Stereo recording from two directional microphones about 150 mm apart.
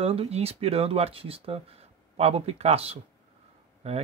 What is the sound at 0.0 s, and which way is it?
Speech, 40° right (ahead or behind).